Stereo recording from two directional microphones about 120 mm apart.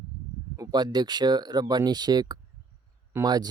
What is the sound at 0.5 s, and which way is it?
Speech, 35° right (ahead or behind).